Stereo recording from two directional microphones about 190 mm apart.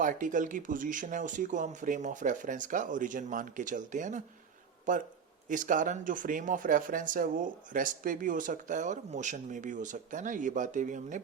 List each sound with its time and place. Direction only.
0.0 s speech: 45° right (ahead or behind)